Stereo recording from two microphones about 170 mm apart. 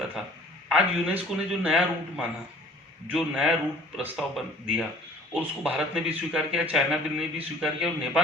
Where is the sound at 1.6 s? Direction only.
10° right (ahead or behind).